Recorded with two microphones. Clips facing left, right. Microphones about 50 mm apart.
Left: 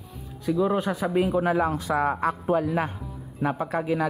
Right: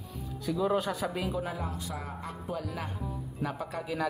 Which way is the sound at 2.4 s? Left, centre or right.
Left.